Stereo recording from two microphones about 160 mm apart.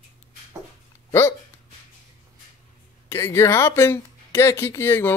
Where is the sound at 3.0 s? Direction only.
15° left (ahead or behind).